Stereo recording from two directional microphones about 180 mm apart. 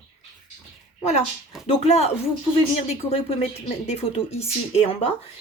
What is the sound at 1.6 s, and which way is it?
A woman's voice, 35° left (ahead or behind).